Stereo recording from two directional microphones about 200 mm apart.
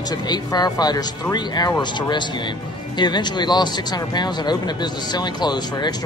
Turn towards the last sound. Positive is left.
turn(degrees=20)  # may be behind; listen again after turning